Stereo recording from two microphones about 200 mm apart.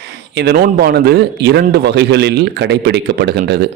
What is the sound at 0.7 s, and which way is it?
A man's voice, 50° right (ahead or behind).